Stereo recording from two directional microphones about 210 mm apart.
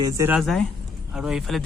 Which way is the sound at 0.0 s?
15° right (ahead or behind).